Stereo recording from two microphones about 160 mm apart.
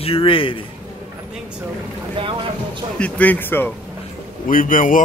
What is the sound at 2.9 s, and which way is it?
Speech, 10° left (ahead or behind).